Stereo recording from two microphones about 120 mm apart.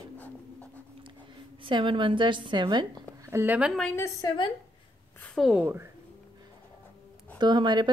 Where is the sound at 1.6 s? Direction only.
45° right (ahead or behind).